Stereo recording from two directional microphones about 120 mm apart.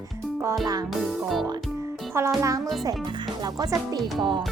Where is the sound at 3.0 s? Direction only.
40° right (ahead or behind).